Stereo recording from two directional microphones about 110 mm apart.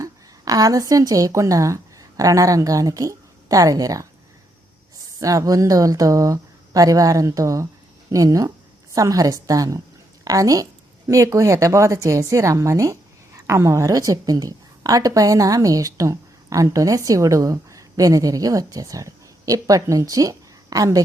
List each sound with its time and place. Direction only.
0.0 s a woman's voice: 35° right (ahead or behind)
5.2 s a woman's voice: 30° right (ahead or behind)